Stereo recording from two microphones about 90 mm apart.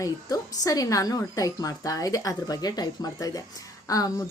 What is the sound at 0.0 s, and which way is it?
A woman's voice, 40° left (ahead or behind).